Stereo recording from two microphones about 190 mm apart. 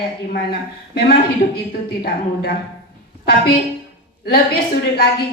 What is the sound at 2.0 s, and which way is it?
Speech, 55° left (ahead or behind).